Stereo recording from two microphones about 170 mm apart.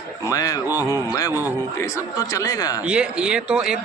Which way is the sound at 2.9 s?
5° right (ahead or behind).